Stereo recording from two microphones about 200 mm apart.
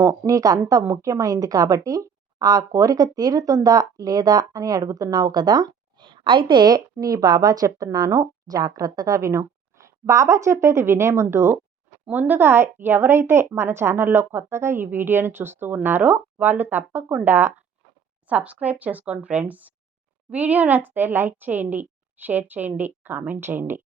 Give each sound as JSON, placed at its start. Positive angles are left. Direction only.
{"t": 0.0, "sound": "a woman's voice", "side_deg": -15}